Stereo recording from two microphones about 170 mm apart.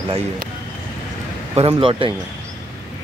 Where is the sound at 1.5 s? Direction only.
35° right (ahead or behind).